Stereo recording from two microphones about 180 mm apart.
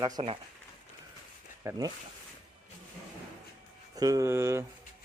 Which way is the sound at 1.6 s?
15° right (ahead or behind).